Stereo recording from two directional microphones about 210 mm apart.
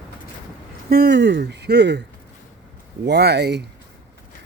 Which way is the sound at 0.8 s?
50° right (ahead or behind).